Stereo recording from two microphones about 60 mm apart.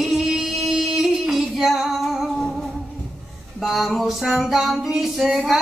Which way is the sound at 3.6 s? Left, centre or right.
Centre.